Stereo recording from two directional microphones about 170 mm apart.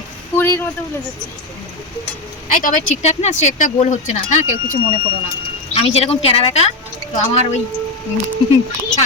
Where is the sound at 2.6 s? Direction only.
45° left (ahead or behind).